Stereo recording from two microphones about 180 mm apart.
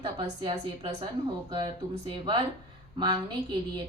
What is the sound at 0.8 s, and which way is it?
A woman's voice, 25° right (ahead or behind).